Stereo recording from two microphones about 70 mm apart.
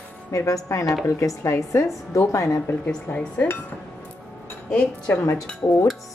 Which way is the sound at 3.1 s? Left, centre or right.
Left.